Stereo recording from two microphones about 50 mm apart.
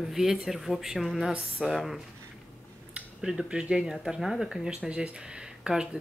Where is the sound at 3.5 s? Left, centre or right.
Centre.